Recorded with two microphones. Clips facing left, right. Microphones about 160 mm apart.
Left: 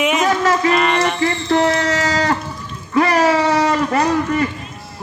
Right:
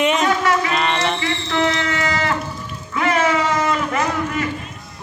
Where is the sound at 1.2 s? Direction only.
45° left (ahead or behind).